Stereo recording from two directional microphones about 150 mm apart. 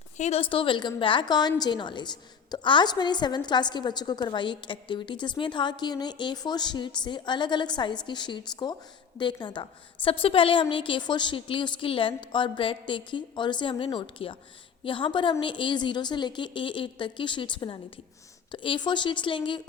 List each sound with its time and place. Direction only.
0.2 s a woman's voice: 45° left (ahead or behind)